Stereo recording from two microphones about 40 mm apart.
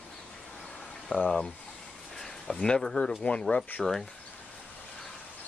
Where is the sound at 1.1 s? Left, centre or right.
Left.